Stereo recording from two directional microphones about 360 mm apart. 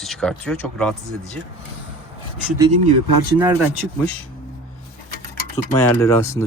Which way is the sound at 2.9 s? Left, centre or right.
Right.